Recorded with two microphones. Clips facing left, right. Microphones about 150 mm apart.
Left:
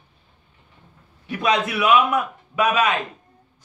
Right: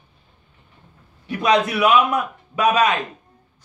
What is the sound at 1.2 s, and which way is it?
Speech, 40° right (ahead or behind).